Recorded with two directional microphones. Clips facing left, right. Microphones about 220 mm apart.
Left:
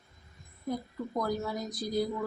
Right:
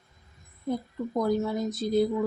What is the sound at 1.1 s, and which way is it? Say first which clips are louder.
Speech: right 6 dB; 25° right (ahead or behind).